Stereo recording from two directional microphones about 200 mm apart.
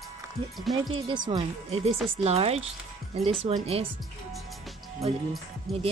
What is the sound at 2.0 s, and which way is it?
Speech, centre (ahead or behind).